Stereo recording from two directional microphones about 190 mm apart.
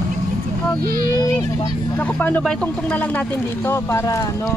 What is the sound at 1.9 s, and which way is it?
Speech, 10° left (ahead or behind).